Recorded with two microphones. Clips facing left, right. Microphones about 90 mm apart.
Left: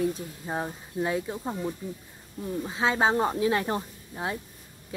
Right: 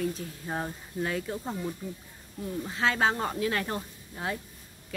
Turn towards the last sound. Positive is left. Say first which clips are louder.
# left 2 dB
turn(degrees=20)  # may be behind; listen again after turning